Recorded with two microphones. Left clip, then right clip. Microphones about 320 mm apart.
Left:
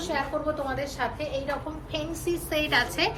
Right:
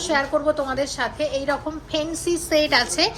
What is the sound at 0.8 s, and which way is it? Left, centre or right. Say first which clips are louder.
A woman's voice: right 7 dB; right.